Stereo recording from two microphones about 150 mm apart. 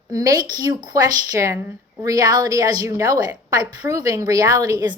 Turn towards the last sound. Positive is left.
turn(degrees=-25)  # may be behind; listen again after turning